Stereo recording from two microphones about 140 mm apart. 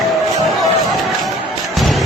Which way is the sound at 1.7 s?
Centre (ahead or behind).